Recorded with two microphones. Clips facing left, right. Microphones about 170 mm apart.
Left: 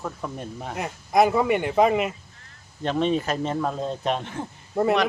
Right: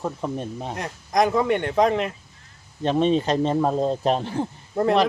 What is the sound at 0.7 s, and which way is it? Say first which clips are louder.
Speech: left 2 dB; 5° left (ahead or behind).